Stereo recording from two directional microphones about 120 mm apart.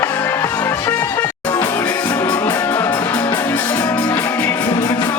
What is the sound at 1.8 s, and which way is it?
Music, 35° left (ahead or behind).